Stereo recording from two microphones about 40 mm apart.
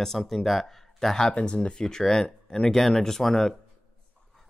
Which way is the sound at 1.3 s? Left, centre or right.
Left.